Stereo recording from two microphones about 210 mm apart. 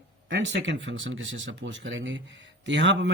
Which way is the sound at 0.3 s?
55° right (ahead or behind).